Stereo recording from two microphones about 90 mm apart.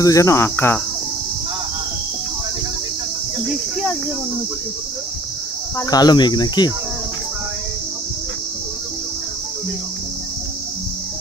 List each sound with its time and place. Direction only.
0.0 s cricket: 35° left (ahead or behind)
5.9 s cricket: 50° left (ahead or behind)